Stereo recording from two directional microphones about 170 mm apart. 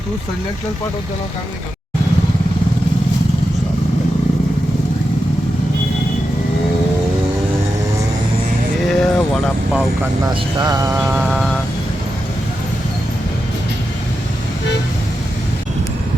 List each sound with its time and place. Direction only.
8.9 s vehicle: centre (ahead or behind)
10.2 s speech: 25° right (ahead or behind)
11.2 s vehicle: centre (ahead or behind)